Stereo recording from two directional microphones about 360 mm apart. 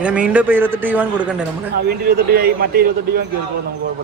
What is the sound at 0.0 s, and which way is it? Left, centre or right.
A man's voice, centre.